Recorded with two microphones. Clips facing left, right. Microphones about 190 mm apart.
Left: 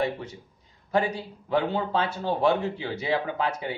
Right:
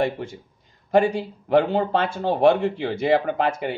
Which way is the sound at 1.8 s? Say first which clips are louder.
Right 5 dB; 60° right (ahead or behind).